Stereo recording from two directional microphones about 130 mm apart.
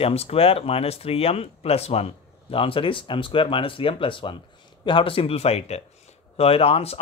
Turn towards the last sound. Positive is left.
turn(degrees=50)  # may be behind; listen again after turning